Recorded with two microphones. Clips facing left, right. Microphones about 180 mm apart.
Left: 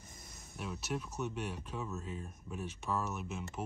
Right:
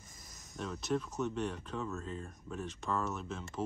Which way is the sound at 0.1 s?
25° left (ahead or behind).